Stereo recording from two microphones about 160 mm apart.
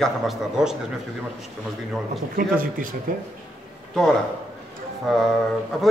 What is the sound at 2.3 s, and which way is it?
Speech, 60° right (ahead or behind).